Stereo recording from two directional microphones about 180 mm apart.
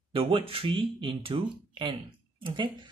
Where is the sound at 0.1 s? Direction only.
30° right (ahead or behind).